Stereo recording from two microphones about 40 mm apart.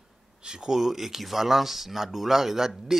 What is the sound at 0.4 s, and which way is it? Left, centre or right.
Speech, right.